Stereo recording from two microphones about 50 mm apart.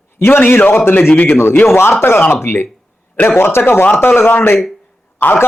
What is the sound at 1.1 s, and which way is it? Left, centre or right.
Speech, left.